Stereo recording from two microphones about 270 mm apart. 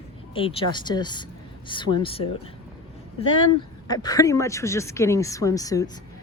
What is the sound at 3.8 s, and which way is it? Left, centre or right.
Speech, centre.